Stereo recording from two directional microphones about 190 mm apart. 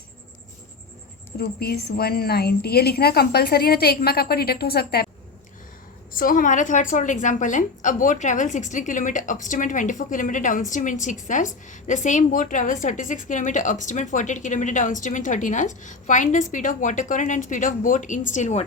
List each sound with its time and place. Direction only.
1.4 s a woman's voice: 55° left (ahead or behind)
6.1 s a woman's voice: 45° left (ahead or behind)